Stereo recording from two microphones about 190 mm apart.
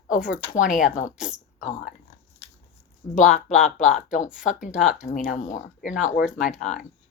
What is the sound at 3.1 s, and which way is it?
Speech, 40° left (ahead or behind).